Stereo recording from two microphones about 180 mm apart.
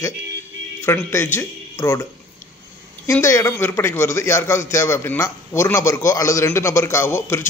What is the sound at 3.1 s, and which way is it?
A man's voice, 15° left (ahead or behind).